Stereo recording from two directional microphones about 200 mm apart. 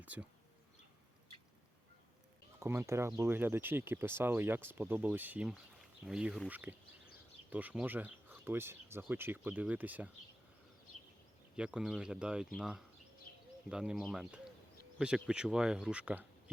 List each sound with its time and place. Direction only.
0.0 s speech: 5° right (ahead or behind)
2.6 s speech: 15° right (ahead or behind)
11.5 s speech: 5° right (ahead or behind)
13.3 s a sound: 45° left (ahead or behind)
13.7 s speech: 5° right (ahead or behind)